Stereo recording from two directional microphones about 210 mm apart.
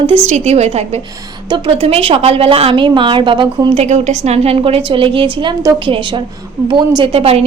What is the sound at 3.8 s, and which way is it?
A woman's voice, 35° right (ahead or behind).